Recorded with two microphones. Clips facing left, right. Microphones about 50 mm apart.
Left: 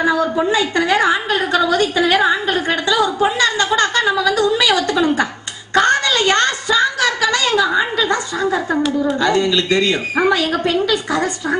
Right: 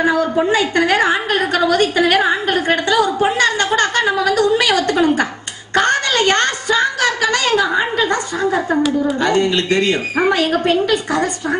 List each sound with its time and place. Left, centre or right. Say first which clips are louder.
0.5 s a woman's voice: right 1 dB; right
4.4 s a sound: right 1 dB; right
9.2 s a woman's voice: even; right